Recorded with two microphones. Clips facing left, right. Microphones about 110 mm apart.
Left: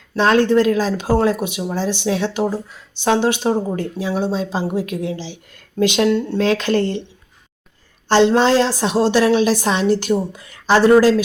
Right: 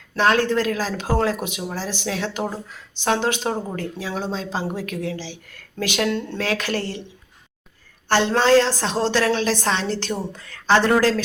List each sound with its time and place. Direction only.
0.2 s speech: 20° left (ahead or behind)
8.0 s a woman's voice: 20° left (ahead or behind)